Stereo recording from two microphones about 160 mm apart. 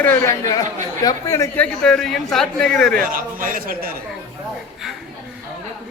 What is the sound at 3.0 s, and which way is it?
Speech, 60° right (ahead or behind).